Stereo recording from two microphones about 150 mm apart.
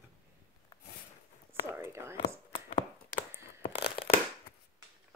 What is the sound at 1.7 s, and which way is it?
Whispering, 15° right (ahead or behind).